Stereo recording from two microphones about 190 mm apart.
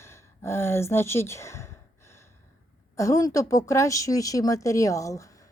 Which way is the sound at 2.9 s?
15° left (ahead or behind).